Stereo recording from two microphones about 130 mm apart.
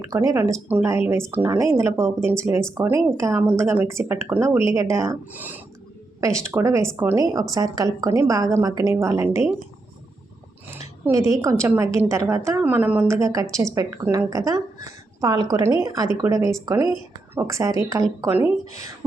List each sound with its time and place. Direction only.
0.1 s a woman's voice: 25° right (ahead or behind)
11.1 s a woman's voice: 25° right (ahead or behind)